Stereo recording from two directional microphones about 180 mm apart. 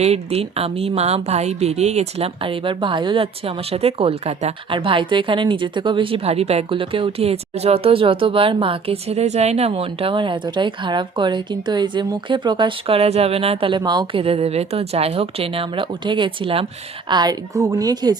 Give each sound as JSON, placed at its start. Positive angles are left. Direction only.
{"t": 0.0, "sound": "a woman's voice", "side_deg": -35}